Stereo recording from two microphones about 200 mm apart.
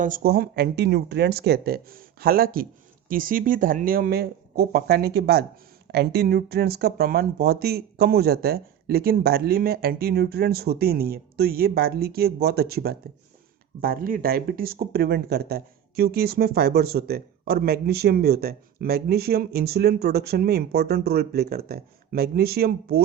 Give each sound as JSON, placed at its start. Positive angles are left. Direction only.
{"t": 0.0, "sound": "speech", "side_deg": -45}